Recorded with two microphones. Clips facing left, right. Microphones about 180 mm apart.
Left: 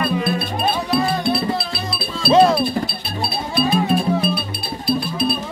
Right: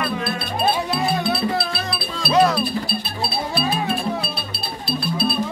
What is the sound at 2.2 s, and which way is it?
Speech, 25° left (ahead or behind).